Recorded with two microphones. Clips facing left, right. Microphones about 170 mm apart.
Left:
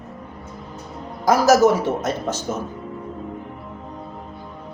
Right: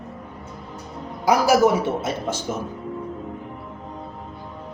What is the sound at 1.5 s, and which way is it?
Speech, 10° right (ahead or behind).